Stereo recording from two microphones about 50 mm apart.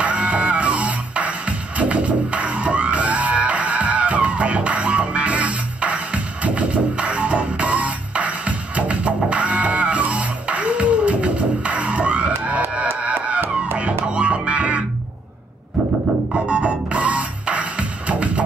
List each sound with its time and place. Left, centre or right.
0.0 s music: right
16.4 s music: right